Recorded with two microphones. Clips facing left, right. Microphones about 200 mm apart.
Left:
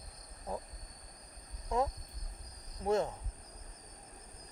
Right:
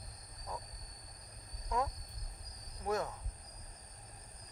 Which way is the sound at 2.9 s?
25° left (ahead or behind).